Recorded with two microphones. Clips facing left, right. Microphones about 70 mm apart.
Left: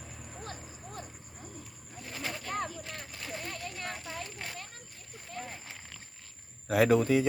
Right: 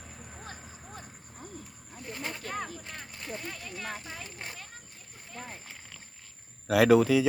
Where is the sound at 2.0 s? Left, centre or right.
Centre.